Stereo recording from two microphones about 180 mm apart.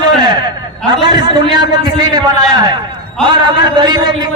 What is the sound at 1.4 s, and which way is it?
A man's voice, 25° right (ahead or behind).